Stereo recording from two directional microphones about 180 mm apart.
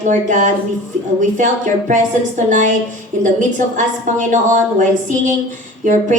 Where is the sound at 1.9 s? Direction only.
45° right (ahead or behind).